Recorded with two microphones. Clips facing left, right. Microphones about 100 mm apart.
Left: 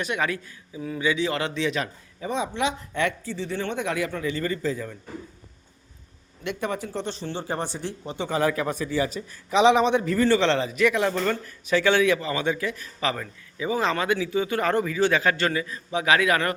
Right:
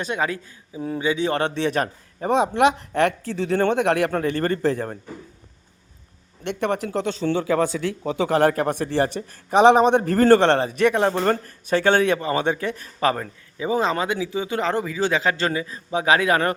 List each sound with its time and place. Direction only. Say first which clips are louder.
0.0 s a man's voice: right 2 dB; 30° right (ahead or behind)
1.5 s a man's voice: right 4 dB; 50° right (ahead or behind)
2.6 s a woman's voice: right 7 dB; 65° right (ahead or behind)
3.2 s speech: right 8 dB; 85° right; by 4.9 s 65° right (ahead or behind)
6.4 s speech: right 5 dB; 65° right (ahead or behind)
10.7 s a man's voice: right 3 dB; 40° right (ahead or behind)
13.1 s speech: right 3 dB; 30° right (ahead or behind)